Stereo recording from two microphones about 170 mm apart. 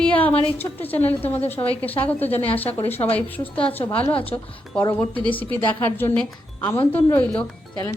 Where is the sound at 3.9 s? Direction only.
30° left (ahead or behind).